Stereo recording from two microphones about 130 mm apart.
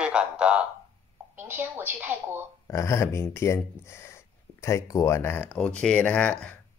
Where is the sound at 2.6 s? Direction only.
20° left (ahead or behind).